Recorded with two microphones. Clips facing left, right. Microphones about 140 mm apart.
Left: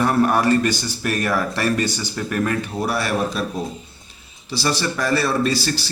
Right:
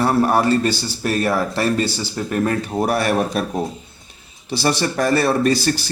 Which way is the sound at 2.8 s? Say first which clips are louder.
Right 5 dB; 50° right (ahead or behind).